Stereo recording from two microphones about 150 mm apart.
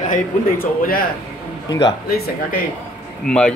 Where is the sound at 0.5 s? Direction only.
75° left (ahead or behind).